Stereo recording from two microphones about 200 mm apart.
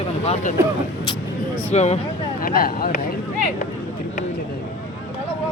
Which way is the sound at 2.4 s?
45° left (ahead or behind).